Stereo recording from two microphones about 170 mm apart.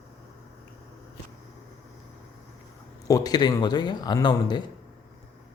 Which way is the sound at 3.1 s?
20° left (ahead or behind).